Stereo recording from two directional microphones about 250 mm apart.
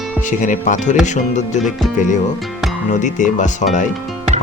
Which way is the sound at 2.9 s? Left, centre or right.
Left.